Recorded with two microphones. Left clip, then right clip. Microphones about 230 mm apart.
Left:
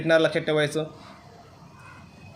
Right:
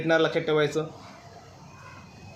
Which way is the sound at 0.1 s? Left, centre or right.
Left.